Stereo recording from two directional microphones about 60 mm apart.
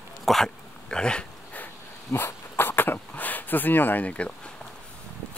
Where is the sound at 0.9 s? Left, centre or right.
Centre.